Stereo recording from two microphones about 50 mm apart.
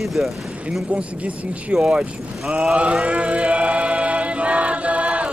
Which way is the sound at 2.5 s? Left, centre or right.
Right.